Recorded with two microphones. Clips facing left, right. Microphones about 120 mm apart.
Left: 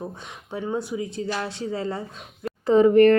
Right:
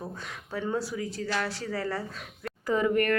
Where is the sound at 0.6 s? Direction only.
20° left (ahead or behind).